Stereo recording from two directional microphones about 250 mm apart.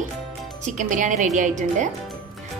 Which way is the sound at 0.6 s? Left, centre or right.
Right.